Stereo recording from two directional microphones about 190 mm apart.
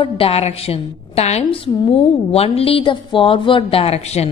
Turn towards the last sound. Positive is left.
turn(degrees=35)  # may be behind; listen again after turning